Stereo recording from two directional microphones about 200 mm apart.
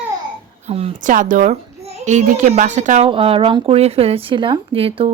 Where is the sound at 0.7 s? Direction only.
30° right (ahead or behind).